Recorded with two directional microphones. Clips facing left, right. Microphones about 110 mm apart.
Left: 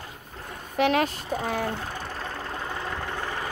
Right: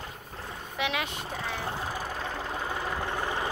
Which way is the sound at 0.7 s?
45° left (ahead or behind).